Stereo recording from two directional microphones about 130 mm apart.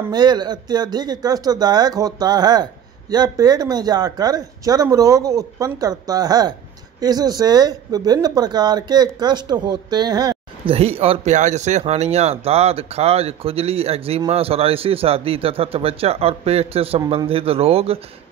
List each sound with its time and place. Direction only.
0.1 s speech: 35° right (ahead or behind)
10.7 s speech: 50° right (ahead or behind)